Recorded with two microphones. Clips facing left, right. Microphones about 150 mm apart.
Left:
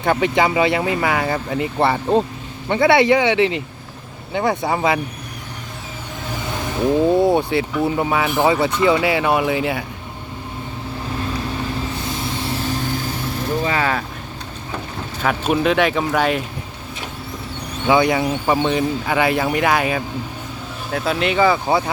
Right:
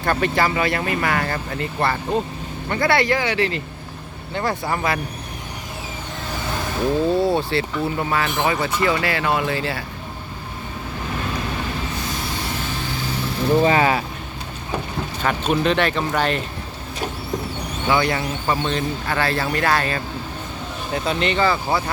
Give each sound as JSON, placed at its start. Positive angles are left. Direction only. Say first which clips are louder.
{"t": 0.0, "sound": "speech", "louder": "left 3 dB", "side_deg": 15}
{"t": 6.7, "sound": "speech", "louder": "left 4 dB", "side_deg": 20}
{"t": 13.6, "sound": "speech", "louder": "right 5 dB", "side_deg": -30}
{"t": 15.2, "sound": "speech", "louder": "left 2 dB", "side_deg": 5}
{"t": 17.8, "sound": "speech", "louder": "left 5 dB", "side_deg": 15}
{"t": 21.7, "sound": "speech", "louder": "left 4 dB", "side_deg": 20}